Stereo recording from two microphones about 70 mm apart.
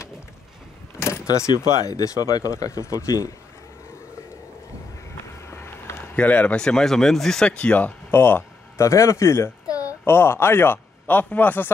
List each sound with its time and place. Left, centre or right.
1.0 s power windows: left
1.9 s speech: left
5.5 s vehicle: left
6.1 s speech: left; by 7.4 s centre
7.4 s speech: centre
8.1 s a sound: left
8.8 s speech: left
9.7 s a sound: left
10.0 s speech: left